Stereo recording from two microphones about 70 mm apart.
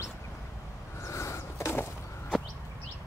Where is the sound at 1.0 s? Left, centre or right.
Left.